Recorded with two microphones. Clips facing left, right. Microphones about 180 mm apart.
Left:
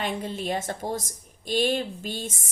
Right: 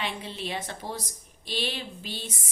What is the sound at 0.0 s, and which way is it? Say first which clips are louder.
A woman's voice: left 5 dB; 45° left (ahead or behind).